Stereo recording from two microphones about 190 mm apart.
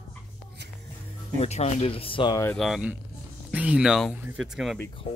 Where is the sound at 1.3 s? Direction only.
35° left (ahead or behind).